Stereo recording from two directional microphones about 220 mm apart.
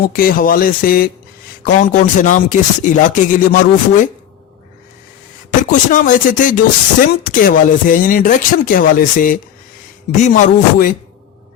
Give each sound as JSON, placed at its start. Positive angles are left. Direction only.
{"t": 0.0, "sound": "speech", "side_deg": 40}
{"t": 5.5, "sound": "speech", "side_deg": 35}